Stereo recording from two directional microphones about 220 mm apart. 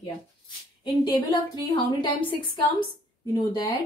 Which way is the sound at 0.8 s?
20° left (ahead or behind).